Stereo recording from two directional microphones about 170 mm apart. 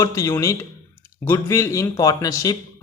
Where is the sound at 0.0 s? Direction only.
20° left (ahead or behind).